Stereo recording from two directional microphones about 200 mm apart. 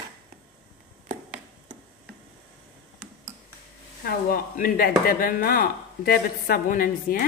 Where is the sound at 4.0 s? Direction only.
45° left (ahead or behind).